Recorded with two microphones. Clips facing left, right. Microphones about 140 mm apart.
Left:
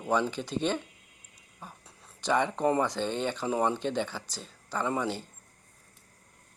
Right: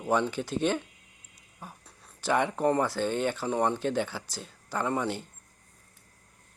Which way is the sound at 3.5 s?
5° left (ahead or behind).